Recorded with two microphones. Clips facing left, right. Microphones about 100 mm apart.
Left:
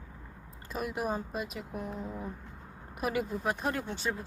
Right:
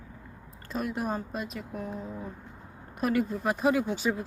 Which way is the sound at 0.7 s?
5° left (ahead or behind).